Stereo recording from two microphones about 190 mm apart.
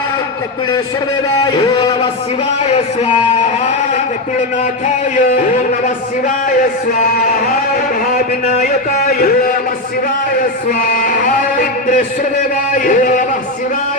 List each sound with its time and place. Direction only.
1.5 s speech: 25° left (ahead or behind)
2.6 s speech: 35° left (ahead or behind)
8.1 s a man's voice: 45° left (ahead or behind)
10.8 s a sound: 45° left (ahead or behind)
12.7 s a man's voice: 45° left (ahead or behind)